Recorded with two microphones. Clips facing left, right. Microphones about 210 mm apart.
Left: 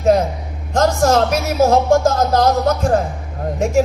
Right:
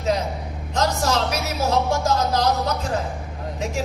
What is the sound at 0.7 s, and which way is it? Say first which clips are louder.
Speech: left 8 dB; 50° left (ahead or behind).